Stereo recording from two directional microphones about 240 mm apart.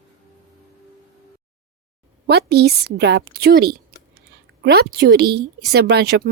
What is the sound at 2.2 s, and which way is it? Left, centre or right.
A woman's voice, right.